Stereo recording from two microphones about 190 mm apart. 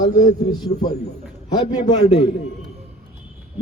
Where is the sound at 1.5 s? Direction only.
20° left (ahead or behind).